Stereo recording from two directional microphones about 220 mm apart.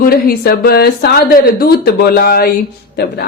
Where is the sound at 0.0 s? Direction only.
45° left (ahead or behind).